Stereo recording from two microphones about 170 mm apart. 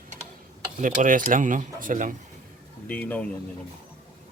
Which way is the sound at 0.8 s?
50° right (ahead or behind).